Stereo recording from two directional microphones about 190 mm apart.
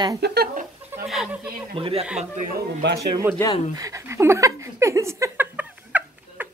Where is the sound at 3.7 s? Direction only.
15° right (ahead or behind).